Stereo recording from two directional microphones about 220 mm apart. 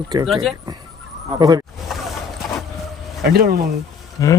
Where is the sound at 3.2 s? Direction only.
45° right (ahead or behind).